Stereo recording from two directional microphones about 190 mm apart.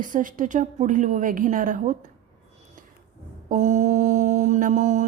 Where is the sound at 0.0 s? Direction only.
45° right (ahead or behind).